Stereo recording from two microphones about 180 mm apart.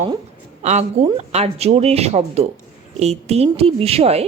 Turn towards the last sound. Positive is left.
turn(degrees=-35)  # may be behind; listen again after turning